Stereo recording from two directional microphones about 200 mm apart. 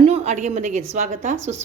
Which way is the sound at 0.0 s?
30° right (ahead or behind).